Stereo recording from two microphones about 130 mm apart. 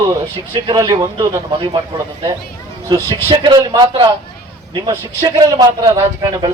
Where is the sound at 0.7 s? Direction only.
30° right (ahead or behind).